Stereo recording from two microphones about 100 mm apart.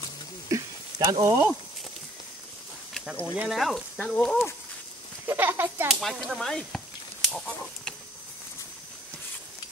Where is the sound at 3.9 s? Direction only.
10° left (ahead or behind).